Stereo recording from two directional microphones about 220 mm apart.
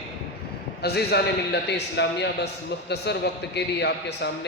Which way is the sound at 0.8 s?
45° left (ahead or behind).